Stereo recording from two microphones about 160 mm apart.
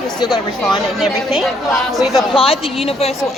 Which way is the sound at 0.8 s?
Centre (ahead or behind).